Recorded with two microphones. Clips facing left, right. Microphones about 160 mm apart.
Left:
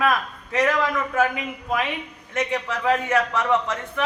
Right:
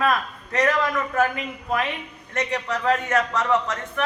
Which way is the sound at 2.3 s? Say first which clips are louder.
Left 1 dB; 5° left (ahead or behind).